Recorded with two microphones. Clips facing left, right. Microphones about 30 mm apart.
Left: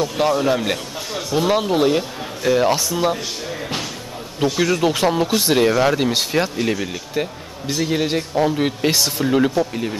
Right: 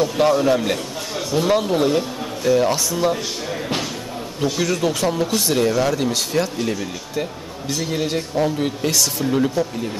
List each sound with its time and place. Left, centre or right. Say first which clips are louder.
0.0 s a man's voice: right 2 dB; centre
4.6 s speech: left 3 dB; centre